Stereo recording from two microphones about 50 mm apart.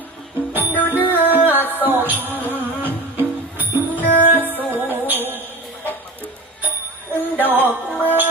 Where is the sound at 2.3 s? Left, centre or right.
Left.